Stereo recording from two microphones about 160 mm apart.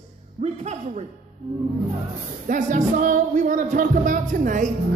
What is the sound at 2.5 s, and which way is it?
A man's voice, 55° right (ahead or behind).